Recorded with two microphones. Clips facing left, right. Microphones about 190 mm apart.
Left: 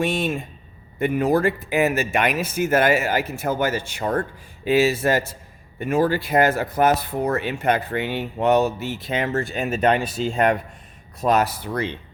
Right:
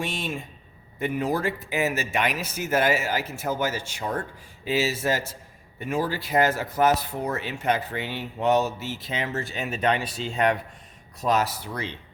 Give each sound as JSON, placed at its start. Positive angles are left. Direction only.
{"t": 0.0, "sound": "speech", "side_deg": 55}
{"t": 11.2, "sound": "speech", "side_deg": 60}